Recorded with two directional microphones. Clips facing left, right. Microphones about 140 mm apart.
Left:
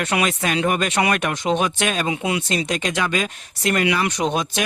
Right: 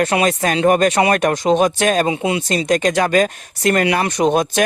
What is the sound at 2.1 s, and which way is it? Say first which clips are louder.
Speech: right 4 dB; 25° right (ahead or behind).